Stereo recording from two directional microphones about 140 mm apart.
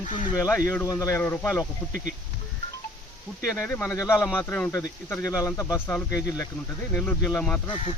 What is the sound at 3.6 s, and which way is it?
Speech, 15° left (ahead or behind).